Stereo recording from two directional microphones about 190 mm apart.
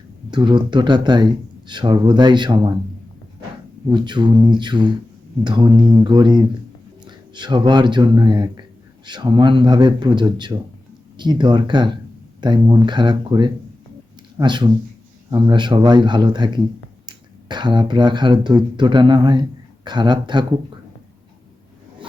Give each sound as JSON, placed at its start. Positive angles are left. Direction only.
{"t": 0.3, "sound": "speech", "side_deg": -25}
{"t": 3.8, "sound": "speech", "side_deg": -25}